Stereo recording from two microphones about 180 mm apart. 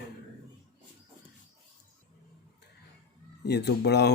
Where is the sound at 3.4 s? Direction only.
65° left (ahead or behind).